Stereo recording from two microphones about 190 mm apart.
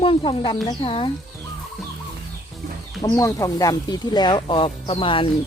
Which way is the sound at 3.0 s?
20° left (ahead or behind).